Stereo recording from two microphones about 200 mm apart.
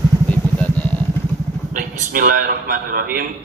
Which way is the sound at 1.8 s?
45° right (ahead or behind).